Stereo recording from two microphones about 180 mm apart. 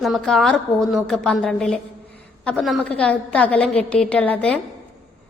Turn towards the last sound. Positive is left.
turn(degrees=5)  # may be behind; listen again after turning